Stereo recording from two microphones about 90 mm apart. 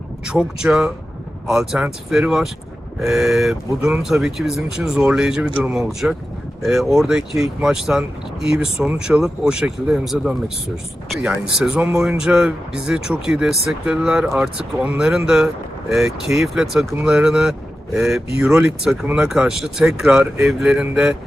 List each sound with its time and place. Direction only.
0.3 s speech: 5° right (ahead or behind)